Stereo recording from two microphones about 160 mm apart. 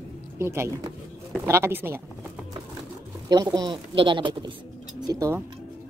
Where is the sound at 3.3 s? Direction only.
25° right (ahead or behind).